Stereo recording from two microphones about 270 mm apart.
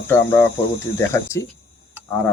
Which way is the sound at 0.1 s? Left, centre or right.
Centre.